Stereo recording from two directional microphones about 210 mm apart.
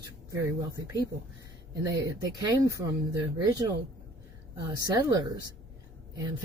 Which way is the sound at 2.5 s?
15° right (ahead or behind).